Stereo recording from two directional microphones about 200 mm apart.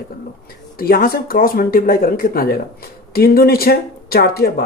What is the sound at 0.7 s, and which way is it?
Speech, 45° left (ahead or behind).